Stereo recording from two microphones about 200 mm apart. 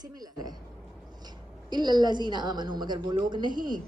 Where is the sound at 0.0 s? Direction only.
20° right (ahead or behind).